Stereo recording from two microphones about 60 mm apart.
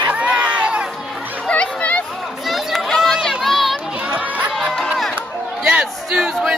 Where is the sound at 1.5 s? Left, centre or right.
Left.